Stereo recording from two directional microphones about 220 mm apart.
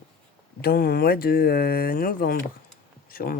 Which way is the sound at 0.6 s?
45° left (ahead or behind).